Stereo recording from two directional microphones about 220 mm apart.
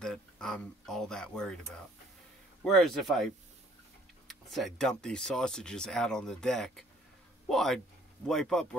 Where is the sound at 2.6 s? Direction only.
Centre (ahead or behind).